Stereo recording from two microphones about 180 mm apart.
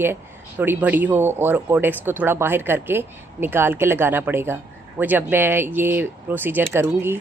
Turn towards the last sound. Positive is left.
turn(degrees=-10)  # may be behind; listen again after turning